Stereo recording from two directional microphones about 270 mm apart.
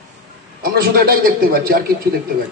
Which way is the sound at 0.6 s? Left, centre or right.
Right.